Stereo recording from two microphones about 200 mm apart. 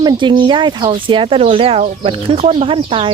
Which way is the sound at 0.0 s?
25° right (ahead or behind).